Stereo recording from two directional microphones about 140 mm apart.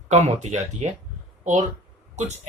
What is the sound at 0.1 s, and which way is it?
Speech, 55° right (ahead or behind).